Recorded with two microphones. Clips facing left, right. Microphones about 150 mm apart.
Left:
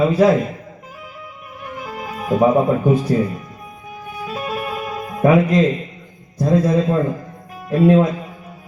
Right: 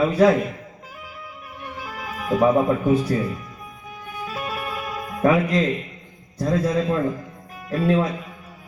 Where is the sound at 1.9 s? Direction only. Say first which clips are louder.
Left 3 dB; 25° left (ahead or behind).